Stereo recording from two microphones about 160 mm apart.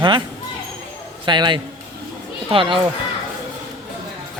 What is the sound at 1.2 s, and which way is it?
Speech, 30° right (ahead or behind).